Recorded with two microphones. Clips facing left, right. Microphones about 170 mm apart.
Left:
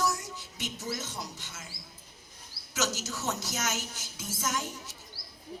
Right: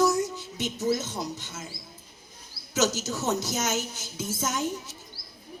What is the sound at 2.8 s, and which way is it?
A child's voice, 20° right (ahead or behind).